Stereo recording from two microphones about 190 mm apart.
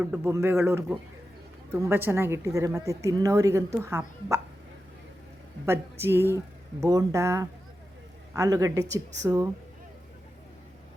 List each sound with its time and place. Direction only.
0.0 s a woman's voice: 10° right (ahead or behind)
5.6 s a woman's voice: 15° right (ahead or behind)